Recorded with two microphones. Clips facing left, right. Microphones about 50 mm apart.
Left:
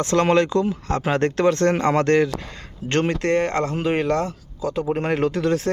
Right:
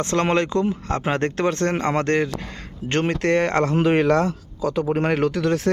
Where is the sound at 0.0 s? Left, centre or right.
Right.